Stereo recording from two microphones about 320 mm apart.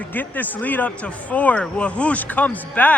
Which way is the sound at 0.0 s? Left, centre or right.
Centre.